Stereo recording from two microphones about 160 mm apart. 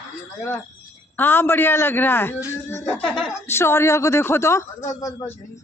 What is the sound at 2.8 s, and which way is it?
Speech, centre (ahead or behind).